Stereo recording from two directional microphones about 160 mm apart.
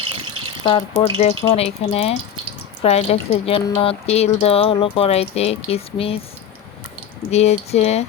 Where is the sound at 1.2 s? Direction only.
40° left (ahead or behind).